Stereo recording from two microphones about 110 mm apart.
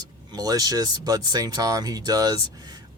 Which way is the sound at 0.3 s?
35° right (ahead or behind).